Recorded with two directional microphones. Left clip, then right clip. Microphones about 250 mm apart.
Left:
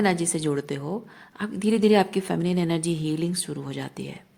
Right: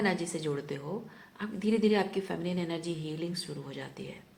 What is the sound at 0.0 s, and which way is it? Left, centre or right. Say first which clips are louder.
A woman's voice: left 7 dB; left.